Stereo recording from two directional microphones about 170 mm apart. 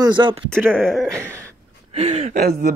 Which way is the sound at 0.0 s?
30° right (ahead or behind).